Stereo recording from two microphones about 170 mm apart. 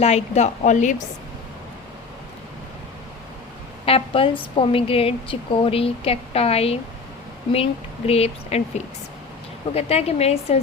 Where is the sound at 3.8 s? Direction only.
35° left (ahead or behind).